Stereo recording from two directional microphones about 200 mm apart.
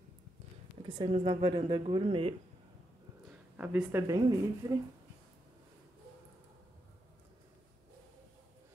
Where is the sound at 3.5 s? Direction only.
10° right (ahead or behind).